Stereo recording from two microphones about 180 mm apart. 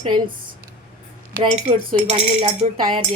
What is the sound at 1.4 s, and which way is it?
Speech, 30° right (ahead or behind).